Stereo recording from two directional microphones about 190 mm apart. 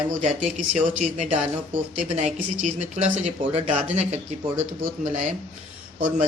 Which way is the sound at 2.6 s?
35° right (ahead or behind).